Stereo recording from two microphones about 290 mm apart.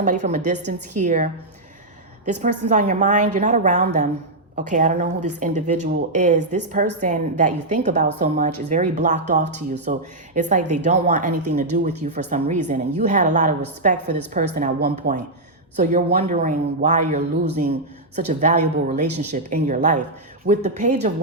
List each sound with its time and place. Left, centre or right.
0.0 s speech: right